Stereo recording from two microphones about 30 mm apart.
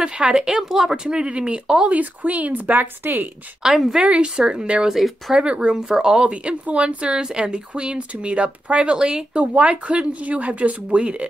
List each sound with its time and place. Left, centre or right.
0.5 s speech: centre
1.0 s speech: right
2.0 s speech: right
3.7 s speech: centre
4.0 s speech: right
5.8 s speech: right
6.3 s speech: right
7.2 s speech: right
8.9 s speech: right
9.3 s speech: right
11.0 s speech: right